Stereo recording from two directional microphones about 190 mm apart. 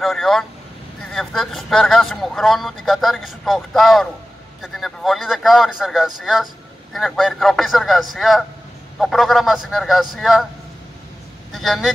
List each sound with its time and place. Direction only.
0.0 s speech: centre (ahead or behind)
11.5 s speech: centre (ahead or behind)